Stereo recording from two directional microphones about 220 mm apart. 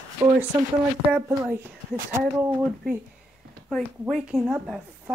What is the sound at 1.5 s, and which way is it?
Speech, 10° right (ahead or behind).